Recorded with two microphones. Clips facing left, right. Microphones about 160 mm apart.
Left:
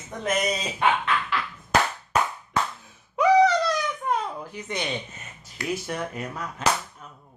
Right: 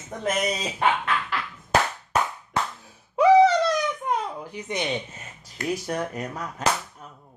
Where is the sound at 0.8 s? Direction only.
40° right (ahead or behind).